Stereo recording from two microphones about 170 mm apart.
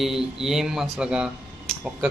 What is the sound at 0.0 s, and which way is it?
Speech, centre (ahead or behind).